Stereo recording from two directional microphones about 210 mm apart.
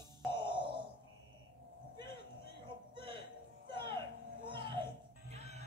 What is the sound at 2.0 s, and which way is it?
Music, 20° right (ahead or behind).